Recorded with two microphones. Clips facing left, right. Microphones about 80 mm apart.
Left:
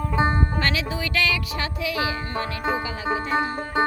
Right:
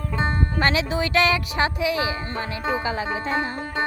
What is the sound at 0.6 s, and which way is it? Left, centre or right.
Speech, right.